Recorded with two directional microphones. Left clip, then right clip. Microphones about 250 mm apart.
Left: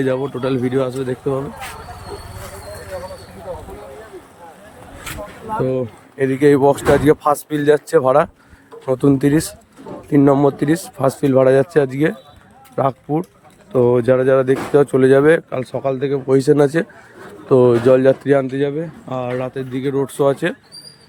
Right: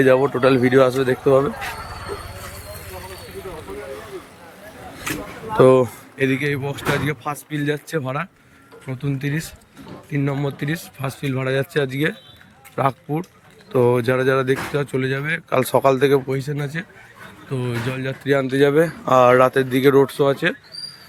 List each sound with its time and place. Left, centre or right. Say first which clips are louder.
0.0 s speech: right 5 dB; centre
5.6 s speech: right 9 dB; centre
6.1 s speech: left 8 dB; centre
15.4 s speech: right 5 dB; centre
16.3 s speech: left 13 dB; left